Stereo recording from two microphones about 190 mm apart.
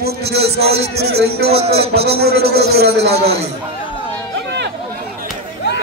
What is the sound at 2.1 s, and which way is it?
A man's voice, 55° right (ahead or behind).